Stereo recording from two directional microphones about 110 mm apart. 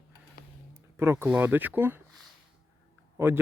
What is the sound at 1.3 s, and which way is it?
Speech, 15° right (ahead or behind).